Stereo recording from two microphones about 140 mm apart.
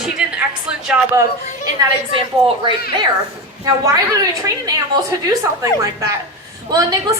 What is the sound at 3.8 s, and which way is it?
Speech, 25° right (ahead or behind).